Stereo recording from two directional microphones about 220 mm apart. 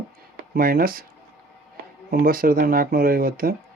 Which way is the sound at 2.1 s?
40° right (ahead or behind).